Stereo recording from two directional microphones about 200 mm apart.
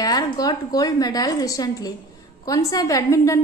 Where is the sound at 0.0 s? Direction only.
20° left (ahead or behind).